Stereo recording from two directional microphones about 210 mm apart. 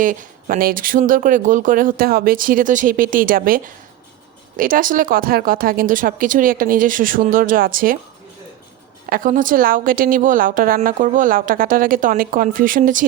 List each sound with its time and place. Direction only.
0.0 s a woman's voice: 40° right (ahead or behind)
9.0 s a woman's voice: 40° right (ahead or behind)